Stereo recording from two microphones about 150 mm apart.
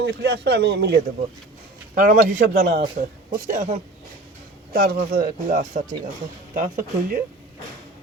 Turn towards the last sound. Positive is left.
turn(degrees=-65)  # may be behind; listen again after turning